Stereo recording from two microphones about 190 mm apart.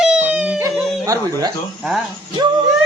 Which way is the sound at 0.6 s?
15° right (ahead or behind).